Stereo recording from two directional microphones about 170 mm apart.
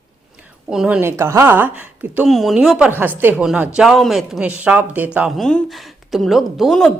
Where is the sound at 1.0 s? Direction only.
15° right (ahead or behind).